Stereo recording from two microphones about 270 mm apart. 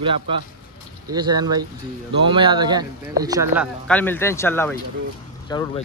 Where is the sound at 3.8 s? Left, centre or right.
Centre.